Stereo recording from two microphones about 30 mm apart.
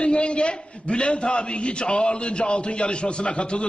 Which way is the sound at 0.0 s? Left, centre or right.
Left.